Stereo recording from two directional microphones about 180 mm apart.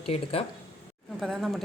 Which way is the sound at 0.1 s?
35° left (ahead or behind).